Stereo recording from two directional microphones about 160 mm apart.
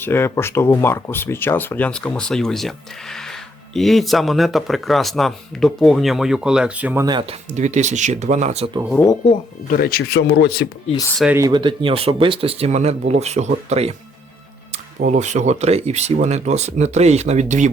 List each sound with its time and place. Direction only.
0.0 s speech: 15° left (ahead or behind); by 7.0 s 10° right (ahead or behind)
7.0 s speech: 30° right (ahead or behind)
7.5 s speech: 50° right (ahead or behind)
9.6 s speech: 65° left (ahead or behind); by 10.7 s 85° left
11.3 s speech: 25° right (ahead or behind); by 13.9 s 40° right (ahead or behind)
15.0 s speech: 45° right (ahead or behind)